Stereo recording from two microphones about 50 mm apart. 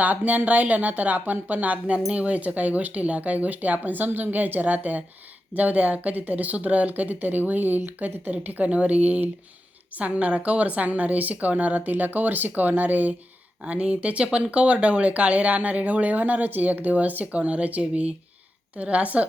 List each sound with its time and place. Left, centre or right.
0.0 s a woman's voice: right
8.3 s a woman's voice: right